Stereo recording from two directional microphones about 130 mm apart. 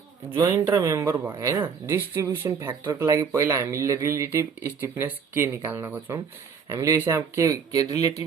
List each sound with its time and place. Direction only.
0.8 s speech: 25° right (ahead or behind)